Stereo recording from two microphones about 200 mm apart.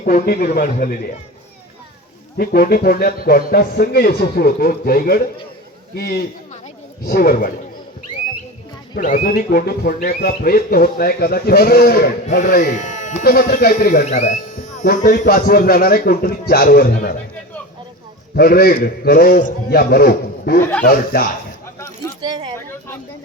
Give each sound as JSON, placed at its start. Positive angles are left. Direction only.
{"t": 0.0, "sound": "speech", "side_deg": 45}
{"t": 2.4, "sound": "speech", "side_deg": 50}
{"t": 9.0, "sound": "speech", "side_deg": 45}
{"t": 13.2, "sound": "speech", "side_deg": 50}
{"t": 18.3, "sound": "speech", "side_deg": 50}
{"t": 21.8, "sound": "a sound", "side_deg": 15}
{"t": 22.2, "sound": "speech", "side_deg": -20}